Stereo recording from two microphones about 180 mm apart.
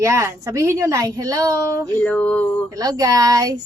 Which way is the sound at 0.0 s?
15° right (ahead or behind).